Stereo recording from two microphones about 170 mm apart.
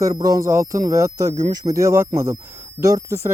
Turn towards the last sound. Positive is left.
turn(degrees=-20)  # may be behind; listen again after turning